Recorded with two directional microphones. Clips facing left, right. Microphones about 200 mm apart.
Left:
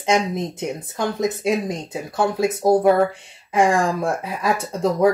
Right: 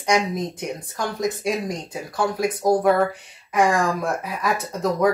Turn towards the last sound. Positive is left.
turn(degrees=30)  # may be behind; listen again after turning